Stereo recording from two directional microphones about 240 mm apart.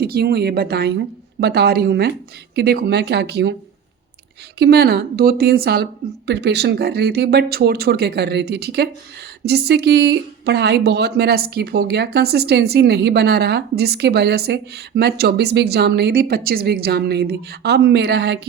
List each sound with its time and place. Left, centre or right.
0.0 s a woman's voice: right
4.5 s a woman's voice: right